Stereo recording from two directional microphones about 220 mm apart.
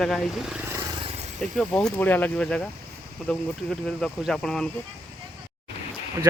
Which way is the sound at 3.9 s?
Centre (ahead or behind).